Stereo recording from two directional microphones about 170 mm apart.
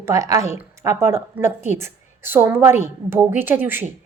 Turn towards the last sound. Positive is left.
turn(degrees=-15)  # may be behind; listen again after turning